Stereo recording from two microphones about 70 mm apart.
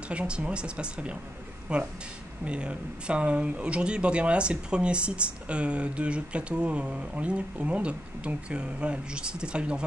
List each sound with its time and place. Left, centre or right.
0.1 s speech: centre